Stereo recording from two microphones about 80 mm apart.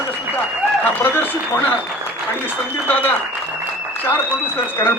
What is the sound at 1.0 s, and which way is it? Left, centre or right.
Speech, left.